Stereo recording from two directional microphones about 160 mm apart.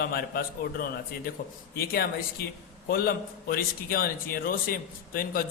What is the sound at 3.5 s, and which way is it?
A man's voice, 70° left (ahead or behind).